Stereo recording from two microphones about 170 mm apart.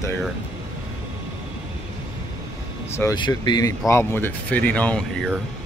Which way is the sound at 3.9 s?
15° left (ahead or behind).